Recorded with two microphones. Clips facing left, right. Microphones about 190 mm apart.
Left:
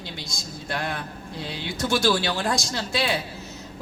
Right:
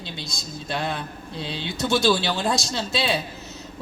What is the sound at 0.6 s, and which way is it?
Speech, 20° right (ahead or behind).